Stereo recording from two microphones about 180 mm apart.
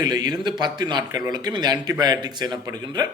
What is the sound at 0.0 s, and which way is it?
A man's voice, 20° right (ahead or behind).